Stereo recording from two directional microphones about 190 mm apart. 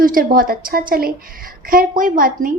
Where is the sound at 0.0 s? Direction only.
45° right (ahead or behind).